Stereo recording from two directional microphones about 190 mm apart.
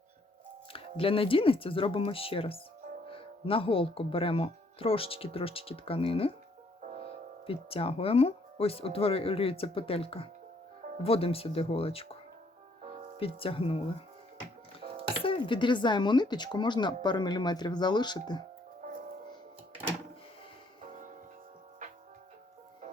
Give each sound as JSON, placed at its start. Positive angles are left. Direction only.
{"t": 0.7, "sound": "speech", "side_deg": 30}
{"t": 7.4, "sound": "speech", "side_deg": 30}
{"t": 13.1, "sound": "speech", "side_deg": 30}
{"t": 15.2, "sound": "speech", "side_deg": 25}